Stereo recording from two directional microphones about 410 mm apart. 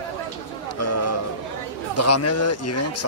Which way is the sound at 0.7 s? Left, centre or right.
Left.